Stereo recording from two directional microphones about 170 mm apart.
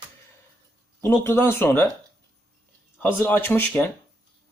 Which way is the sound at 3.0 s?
10° left (ahead or behind).